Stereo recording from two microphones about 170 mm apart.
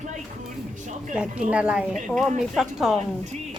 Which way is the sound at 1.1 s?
5° right (ahead or behind).